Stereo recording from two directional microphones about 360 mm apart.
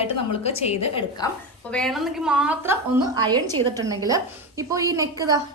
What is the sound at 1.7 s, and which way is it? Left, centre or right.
A woman's voice, centre.